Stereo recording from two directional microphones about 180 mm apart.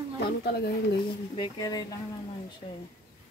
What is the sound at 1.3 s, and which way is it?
Speech, 25° left (ahead or behind).